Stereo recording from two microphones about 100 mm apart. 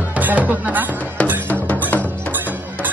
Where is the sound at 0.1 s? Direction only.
15° right (ahead or behind).